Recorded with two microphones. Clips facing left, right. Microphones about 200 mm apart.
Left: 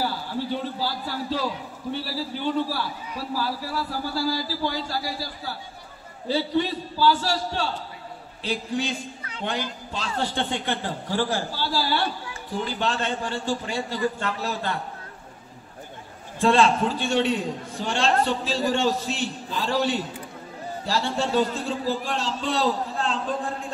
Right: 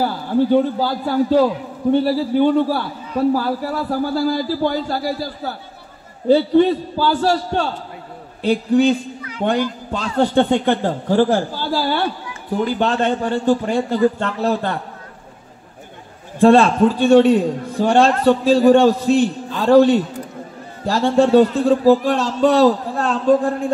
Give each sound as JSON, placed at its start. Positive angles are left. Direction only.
{"t": 0.0, "sound": "a man's voice", "side_deg": -50}
{"t": 16.3, "sound": "a man's voice", "side_deg": -55}
{"t": 18.2, "sound": "a man's voice", "side_deg": -45}
{"t": 18.6, "sound": "a man's voice", "side_deg": -55}